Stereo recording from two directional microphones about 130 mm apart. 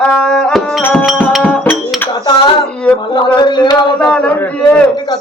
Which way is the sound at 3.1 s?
35° left (ahead or behind).